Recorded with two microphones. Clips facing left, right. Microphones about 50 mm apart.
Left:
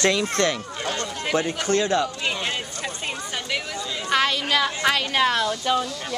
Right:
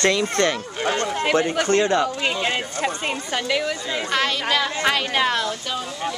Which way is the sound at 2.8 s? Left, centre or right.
Right.